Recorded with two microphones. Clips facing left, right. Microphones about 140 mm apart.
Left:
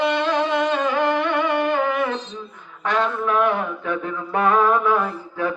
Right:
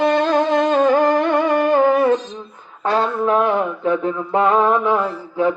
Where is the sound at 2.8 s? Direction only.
35° right (ahead or behind).